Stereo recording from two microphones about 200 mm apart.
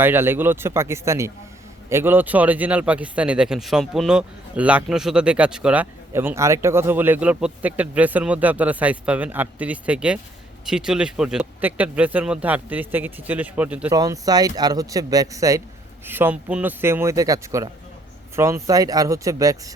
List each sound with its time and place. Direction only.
0.0 s speech: 10° right (ahead or behind)
13.9 s speech: 20° right (ahead or behind)